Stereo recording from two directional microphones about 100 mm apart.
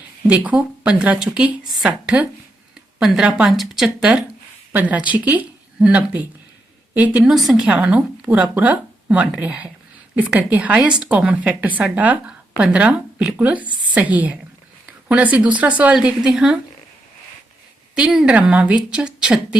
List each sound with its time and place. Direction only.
0.3 s speech: 15° right (ahead or behind)
7.3 s speech: 5° right (ahead or behind)
17.9 s speech: 10° right (ahead or behind)